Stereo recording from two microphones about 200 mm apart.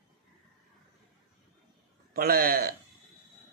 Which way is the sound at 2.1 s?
50° right (ahead or behind).